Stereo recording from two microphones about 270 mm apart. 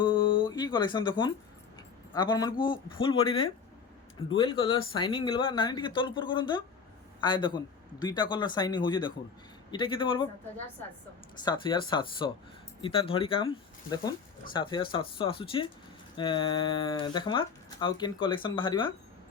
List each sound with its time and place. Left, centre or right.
0.0 s a sound: centre
2.1 s speech: centre
11.4 s speech: centre